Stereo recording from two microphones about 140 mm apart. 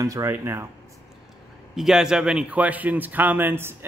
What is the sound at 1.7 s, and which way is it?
A man's voice, centre (ahead or behind).